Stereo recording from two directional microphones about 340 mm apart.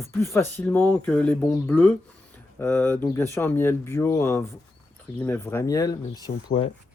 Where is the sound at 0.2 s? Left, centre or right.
Centre.